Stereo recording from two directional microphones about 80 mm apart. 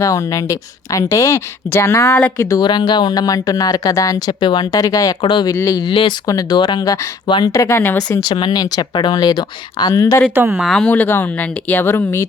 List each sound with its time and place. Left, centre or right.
0.0 s speech: left
2.6 s speech: left
4.4 s speech: left
5.2 s speech: left
5.5 s speech: left
5.8 s speech: left
6.2 s speech: left
7.3 s speech: left
7.5 s speech: left
8.2 s speech: left
9.9 s speech: left
10.5 s speech: centre
10.8 s speech: left